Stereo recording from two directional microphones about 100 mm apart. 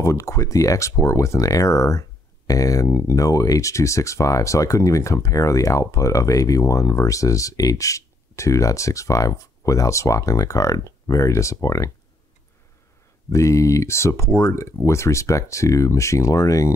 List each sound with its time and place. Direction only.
0.0 s speech: 30° left (ahead or behind)
13.3 s speech: 30° left (ahead or behind)